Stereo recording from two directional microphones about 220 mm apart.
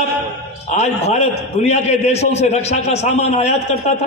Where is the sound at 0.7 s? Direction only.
30° left (ahead or behind).